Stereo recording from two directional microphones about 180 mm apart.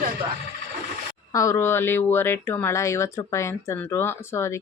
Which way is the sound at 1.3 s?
15° left (ahead or behind).